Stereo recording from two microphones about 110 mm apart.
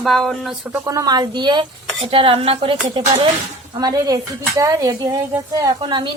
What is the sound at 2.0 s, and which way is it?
Speech, 60° right (ahead or behind).